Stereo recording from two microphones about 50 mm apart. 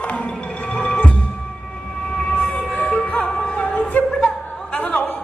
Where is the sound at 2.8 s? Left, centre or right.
Left.